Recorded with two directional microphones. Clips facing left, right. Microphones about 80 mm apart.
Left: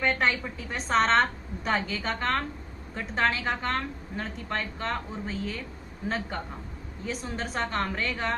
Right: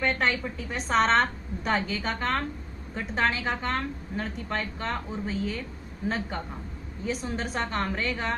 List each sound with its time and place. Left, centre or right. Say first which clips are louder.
0.0 s a woman's voice: even; centre